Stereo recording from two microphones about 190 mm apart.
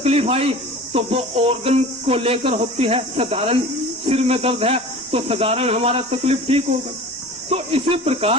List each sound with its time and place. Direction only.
0.0 s speech: 30° right (ahead or behind)